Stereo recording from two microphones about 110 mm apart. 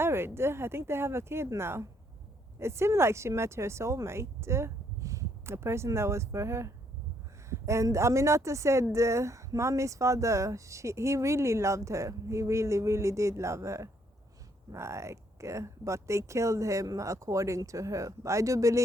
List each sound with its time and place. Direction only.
0.0 s speech: 20° right (ahead or behind)